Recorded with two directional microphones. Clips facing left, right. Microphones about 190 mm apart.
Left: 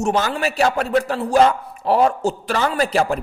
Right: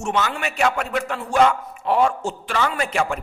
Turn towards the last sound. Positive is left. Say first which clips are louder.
# left 4 dB
turn(degrees=35)  # may be behind; listen again after turning